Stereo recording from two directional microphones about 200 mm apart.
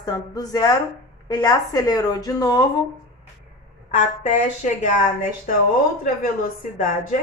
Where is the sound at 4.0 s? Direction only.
40° left (ahead or behind).